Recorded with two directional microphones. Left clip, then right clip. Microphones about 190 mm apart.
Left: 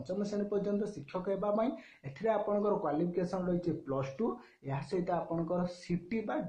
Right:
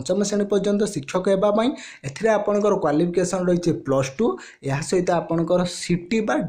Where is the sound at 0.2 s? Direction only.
35° right (ahead or behind).